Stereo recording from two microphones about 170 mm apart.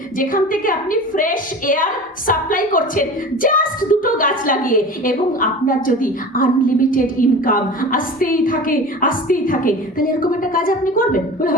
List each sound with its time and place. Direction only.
0.2 s a woman's voice: 55° left (ahead or behind)